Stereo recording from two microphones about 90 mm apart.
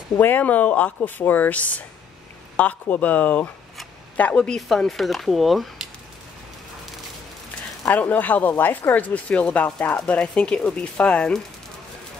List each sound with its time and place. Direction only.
0.2 s speech: 20° left (ahead or behind)
4.6 s speech: centre (ahead or behind)
7.9 s speech: 20° left (ahead or behind)